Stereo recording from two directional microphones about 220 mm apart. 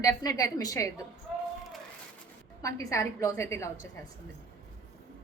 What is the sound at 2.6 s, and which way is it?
A woman's voice, 15° left (ahead or behind).